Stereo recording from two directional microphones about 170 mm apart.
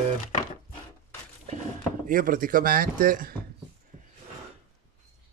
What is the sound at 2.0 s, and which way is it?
Speech, 55° right (ahead or behind).